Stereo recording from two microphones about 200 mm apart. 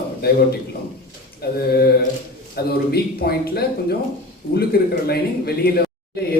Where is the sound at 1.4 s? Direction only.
55° left (ahead or behind).